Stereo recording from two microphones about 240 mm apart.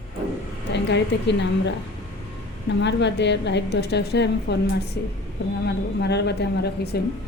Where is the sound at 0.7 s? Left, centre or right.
Left.